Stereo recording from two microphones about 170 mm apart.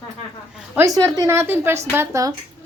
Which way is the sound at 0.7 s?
20° right (ahead or behind).